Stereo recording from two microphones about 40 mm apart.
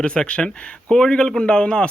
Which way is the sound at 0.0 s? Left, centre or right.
Left.